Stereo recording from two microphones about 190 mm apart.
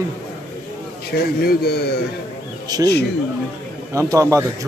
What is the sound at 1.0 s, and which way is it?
Speech, 55° left (ahead or behind).